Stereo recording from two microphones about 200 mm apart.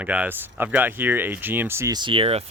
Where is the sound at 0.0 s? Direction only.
10° right (ahead or behind).